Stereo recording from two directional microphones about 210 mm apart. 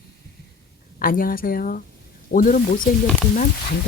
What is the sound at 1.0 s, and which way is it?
Speech, 40° left (ahead or behind).